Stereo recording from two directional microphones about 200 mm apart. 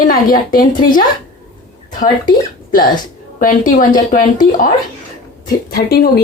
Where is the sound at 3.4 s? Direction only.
40° left (ahead or behind).